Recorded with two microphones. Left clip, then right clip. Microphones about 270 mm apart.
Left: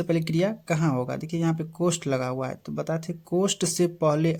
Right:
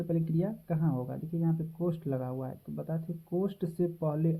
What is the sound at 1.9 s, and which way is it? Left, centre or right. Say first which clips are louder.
Speech: left 9 dB; left.